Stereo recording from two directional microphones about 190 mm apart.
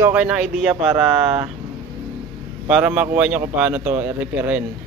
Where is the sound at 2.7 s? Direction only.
10° right (ahead or behind).